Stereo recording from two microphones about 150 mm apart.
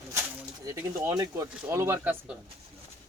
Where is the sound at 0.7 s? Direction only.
20° right (ahead or behind).